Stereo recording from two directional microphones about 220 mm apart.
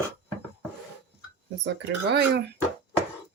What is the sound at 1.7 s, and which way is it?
Speech, 50° right (ahead or behind).